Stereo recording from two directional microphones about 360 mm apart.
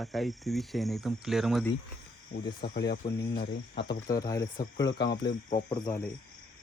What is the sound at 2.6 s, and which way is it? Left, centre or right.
Speech, left.